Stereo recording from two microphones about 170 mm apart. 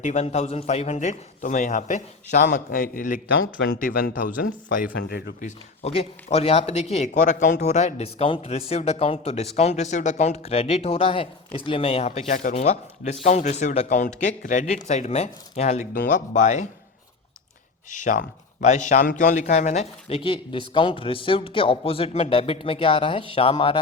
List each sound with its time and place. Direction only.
0.0 s speech: 40° left (ahead or behind); by 5.3 s 65° left (ahead or behind)
5.4 s speech: 40° left (ahead or behind)
17.9 s speech: 50° left (ahead or behind); by 23.7 s 30° left (ahead or behind)